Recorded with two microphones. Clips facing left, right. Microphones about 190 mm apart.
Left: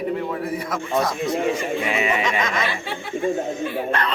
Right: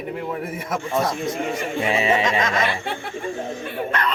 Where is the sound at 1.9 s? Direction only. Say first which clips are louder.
Right 5 dB; 30° right (ahead or behind).